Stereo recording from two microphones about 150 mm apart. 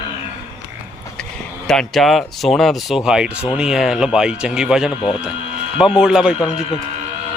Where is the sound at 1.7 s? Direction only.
Centre (ahead or behind).